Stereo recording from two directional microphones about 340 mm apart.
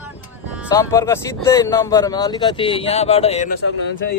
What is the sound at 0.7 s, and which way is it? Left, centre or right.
Speech, centre.